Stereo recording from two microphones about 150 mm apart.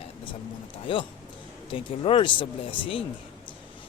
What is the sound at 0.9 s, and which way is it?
Speech, 35° left (ahead or behind).